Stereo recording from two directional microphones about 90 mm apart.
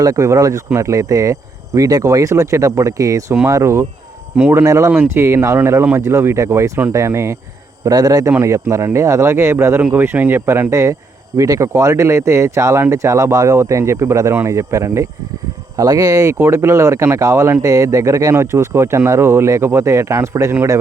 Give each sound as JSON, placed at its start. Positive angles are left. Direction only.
{"t": 0.0, "sound": "speech", "side_deg": -40}
{"t": 4.4, "sound": "speech", "side_deg": -20}
{"t": 4.6, "sound": "speech", "side_deg": -35}
{"t": 4.9, "sound": "speech", "side_deg": -25}
{"t": 7.9, "sound": "speech", "side_deg": -45}
{"t": 10.7, "sound": "speech", "side_deg": -35}